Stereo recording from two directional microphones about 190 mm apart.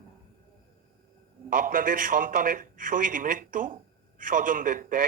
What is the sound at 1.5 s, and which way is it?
A man's voice, 45° right (ahead or behind).